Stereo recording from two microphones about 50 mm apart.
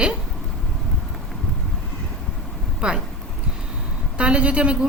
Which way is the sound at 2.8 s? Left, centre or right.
Centre.